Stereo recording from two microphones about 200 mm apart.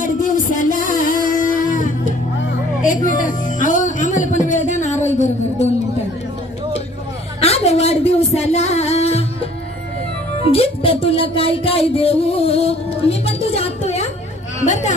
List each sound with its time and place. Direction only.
0.0 s music: 40° left (ahead or behind)
7.3 s a sound: 30° left (ahead or behind)
8.4 s music: 30° left (ahead or behind)
10.4 s speech: 30° left (ahead or behind)